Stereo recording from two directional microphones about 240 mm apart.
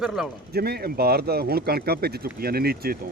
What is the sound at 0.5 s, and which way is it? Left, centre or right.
Speech, right.